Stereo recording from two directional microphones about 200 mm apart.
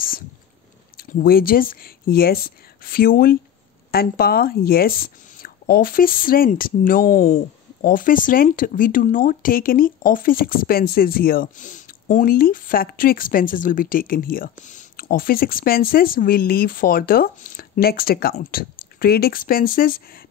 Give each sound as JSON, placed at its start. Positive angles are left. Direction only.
{"t": 0.9, "sound": "speech", "side_deg": 45}